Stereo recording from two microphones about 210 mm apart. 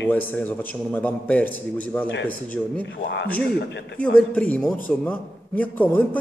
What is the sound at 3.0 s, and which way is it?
Speech, 55° left (ahead or behind).